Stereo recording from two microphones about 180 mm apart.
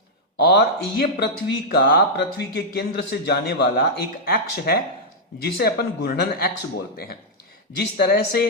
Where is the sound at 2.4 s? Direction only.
65° left (ahead or behind).